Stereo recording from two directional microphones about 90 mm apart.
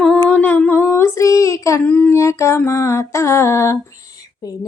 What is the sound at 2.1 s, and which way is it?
Female singing, 35° left (ahead or behind).